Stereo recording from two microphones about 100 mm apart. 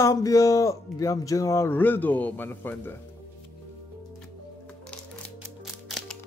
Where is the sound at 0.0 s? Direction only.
35° left (ahead or behind).